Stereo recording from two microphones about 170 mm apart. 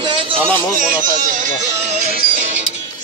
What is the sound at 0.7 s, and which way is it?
Speech, 55° right (ahead or behind).